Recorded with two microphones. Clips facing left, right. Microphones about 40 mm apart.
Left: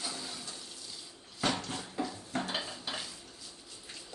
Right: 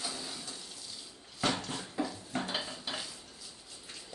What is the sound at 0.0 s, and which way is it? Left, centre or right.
Toilet flush, centre.